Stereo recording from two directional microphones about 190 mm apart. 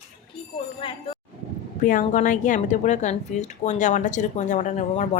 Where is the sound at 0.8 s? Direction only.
30° left (ahead or behind).